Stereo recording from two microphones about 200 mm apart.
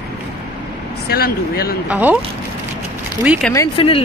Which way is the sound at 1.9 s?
10° right (ahead or behind).